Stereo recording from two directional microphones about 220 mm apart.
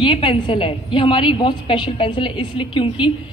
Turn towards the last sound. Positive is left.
turn(degrees=20)  # may be behind; listen again after turning